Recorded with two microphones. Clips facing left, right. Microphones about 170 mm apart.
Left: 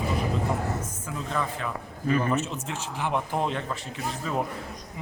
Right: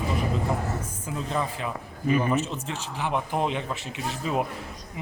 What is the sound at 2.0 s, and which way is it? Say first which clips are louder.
Speech: right 1 dB; 10° right (ahead or behind).